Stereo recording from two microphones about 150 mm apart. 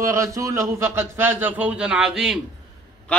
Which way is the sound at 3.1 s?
10° left (ahead or behind).